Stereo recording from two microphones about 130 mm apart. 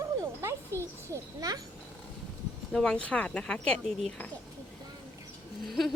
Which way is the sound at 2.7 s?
5° left (ahead or behind).